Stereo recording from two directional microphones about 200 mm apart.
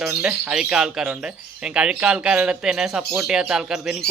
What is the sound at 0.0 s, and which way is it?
Speech, 5° right (ahead or behind).